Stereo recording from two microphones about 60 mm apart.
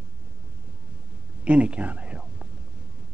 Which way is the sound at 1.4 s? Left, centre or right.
Right.